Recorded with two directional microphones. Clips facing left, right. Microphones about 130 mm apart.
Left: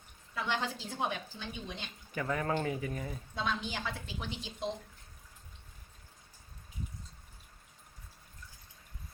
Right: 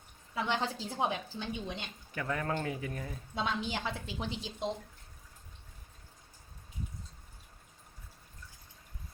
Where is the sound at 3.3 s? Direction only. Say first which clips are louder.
Right 2 dB; 20° right (ahead or behind).